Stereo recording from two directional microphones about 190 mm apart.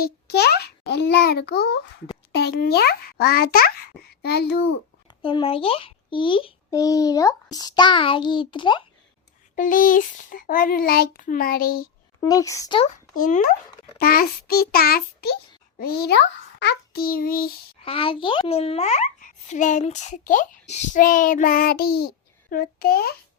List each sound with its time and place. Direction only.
0.0 s a child's voice: 55° left (ahead or behind)
5.2 s a child's voice: 30° left (ahead or behind)
9.6 s child singing: 45° left (ahead or behind)
12.2 s speech: 15° left (ahead or behind)
12.8 s child singing: 45° left (ahead or behind)
15.8 s a child's voice: 55° left (ahead or behind)
17.8 s a child's voice: 30° left (ahead or behind); by 23.1 s 55° left (ahead or behind)